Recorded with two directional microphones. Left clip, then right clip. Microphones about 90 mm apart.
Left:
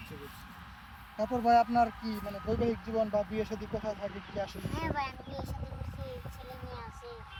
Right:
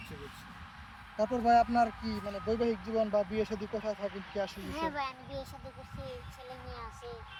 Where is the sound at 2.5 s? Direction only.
50° right (ahead or behind).